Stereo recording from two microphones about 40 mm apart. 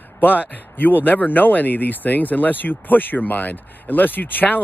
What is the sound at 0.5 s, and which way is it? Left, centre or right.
Speech, left.